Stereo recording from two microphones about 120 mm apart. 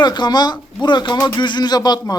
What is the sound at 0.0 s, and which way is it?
Speech, 35° left (ahead or behind).